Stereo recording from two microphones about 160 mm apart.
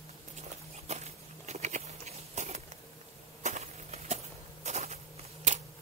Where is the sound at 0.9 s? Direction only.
45° right (ahead or behind).